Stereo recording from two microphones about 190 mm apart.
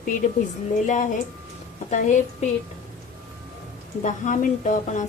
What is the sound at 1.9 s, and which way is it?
Speech, 40° left (ahead or behind).